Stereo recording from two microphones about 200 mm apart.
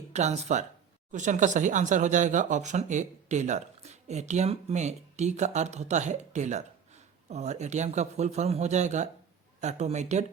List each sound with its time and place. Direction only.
0.1 s speech: 35° right (ahead or behind)